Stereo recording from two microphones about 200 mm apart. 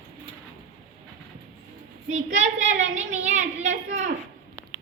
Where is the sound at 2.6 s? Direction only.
70° right (ahead or behind).